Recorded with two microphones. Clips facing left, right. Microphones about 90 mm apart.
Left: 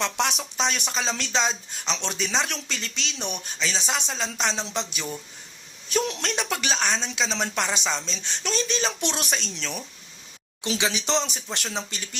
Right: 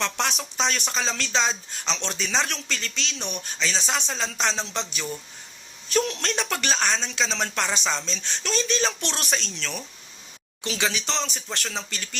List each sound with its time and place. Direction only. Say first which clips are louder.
0.0 s a woman's voice: left 1 dB; 10° left (ahead or behind)
6.2 s a woman's voice: right 1 dB; 5° left (ahead or behind)